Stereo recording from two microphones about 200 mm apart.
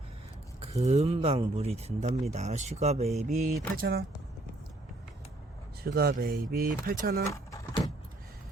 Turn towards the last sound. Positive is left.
turn(degrees=15)  # may be behind; listen again after turning